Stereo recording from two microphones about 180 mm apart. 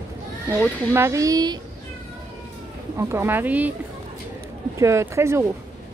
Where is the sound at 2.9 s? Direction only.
15° right (ahead or behind).